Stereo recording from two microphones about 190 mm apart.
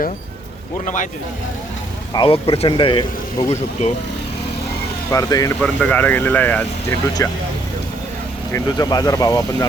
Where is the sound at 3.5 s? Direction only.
40° left (ahead or behind).